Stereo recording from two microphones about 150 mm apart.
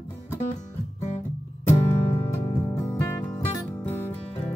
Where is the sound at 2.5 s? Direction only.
20° left (ahead or behind).